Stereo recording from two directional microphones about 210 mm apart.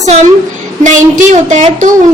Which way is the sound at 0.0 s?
35° right (ahead or behind).